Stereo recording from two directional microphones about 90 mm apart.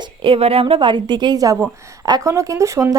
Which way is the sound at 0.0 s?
75° right (ahead or behind).